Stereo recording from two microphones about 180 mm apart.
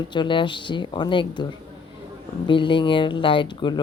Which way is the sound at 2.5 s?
25° left (ahead or behind).